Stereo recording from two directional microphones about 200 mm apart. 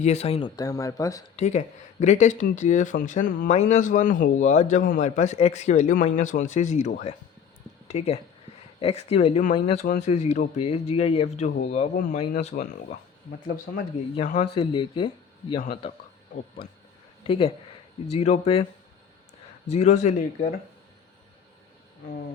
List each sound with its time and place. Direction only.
0.0 s speech: 35° left (ahead or behind)
0.5 s speech: 15° left (ahead or behind)
1.4 s speech: 35° left (ahead or behind)
14.2 s speech: 40° left (ahead or behind)
14.5 s speech: 30° left (ahead or behind)
17.2 s speech: 25° left (ahead or behind)
19.6 s speech: 35° left (ahead or behind)